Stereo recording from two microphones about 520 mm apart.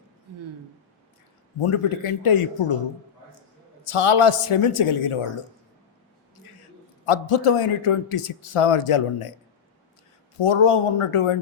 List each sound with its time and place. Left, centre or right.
1.5 s a man's voice: left
3.8 s a man's voice: left
7.0 s a man's voice: left
10.4 s a man's voice: left